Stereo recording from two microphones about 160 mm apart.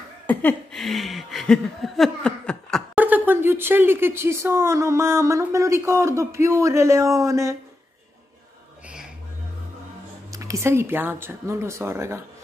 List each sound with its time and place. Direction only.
0.3 s chuckle: 10° left (ahead or behind)
2.9 s speech: 10° right (ahead or behind)
10.3 s speech: 20° right (ahead or behind)